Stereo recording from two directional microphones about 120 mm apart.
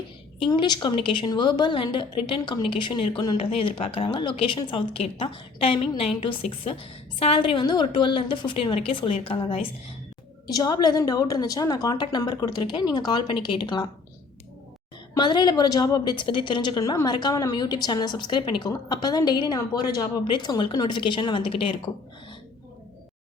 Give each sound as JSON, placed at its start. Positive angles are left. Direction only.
{"t": 0.3, "sound": "a woman's voice", "side_deg": 45}
{"t": 10.5, "sound": "a woman's voice", "side_deg": 35}
{"t": 15.2, "sound": "a woman's voice", "side_deg": 35}